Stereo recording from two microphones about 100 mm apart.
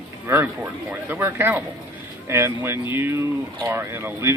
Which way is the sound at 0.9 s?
20° right (ahead or behind).